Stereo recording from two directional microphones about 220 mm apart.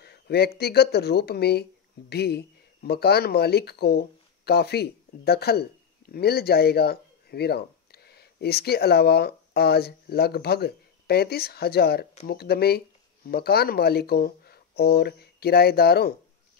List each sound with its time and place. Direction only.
0.0 s speech: 45° left (ahead or behind)